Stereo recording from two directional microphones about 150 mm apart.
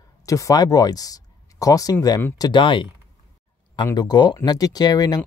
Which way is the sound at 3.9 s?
25° left (ahead or behind).